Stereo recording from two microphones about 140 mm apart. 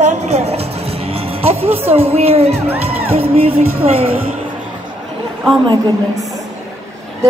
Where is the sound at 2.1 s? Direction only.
50° right (ahead or behind).